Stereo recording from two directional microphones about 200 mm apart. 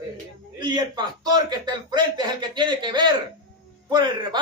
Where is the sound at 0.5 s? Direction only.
20° right (ahead or behind).